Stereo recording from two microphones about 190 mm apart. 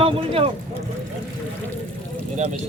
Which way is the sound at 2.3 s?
40° right (ahead or behind).